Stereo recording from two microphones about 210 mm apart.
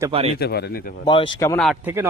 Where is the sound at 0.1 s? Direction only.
30° right (ahead or behind).